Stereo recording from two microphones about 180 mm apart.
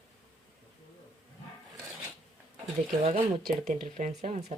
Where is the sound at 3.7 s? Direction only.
40° right (ahead or behind).